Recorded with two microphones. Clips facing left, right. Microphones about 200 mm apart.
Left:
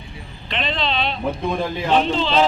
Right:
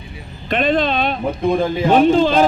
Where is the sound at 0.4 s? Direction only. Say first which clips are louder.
Right 8 dB; 50° right (ahead or behind).